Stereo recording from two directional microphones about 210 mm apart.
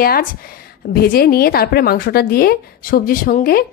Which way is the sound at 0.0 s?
45° left (ahead or behind).